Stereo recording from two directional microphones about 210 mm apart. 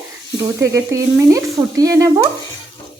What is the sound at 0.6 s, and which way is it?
A woman's voice, 15° right (ahead or behind).